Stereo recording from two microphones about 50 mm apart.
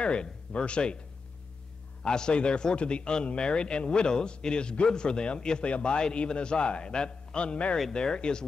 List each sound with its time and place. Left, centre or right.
0.0 s speech: left
2.0 s a man's voice: centre